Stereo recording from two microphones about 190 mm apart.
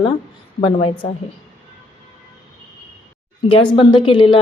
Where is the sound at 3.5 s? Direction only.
25° left (ahead or behind).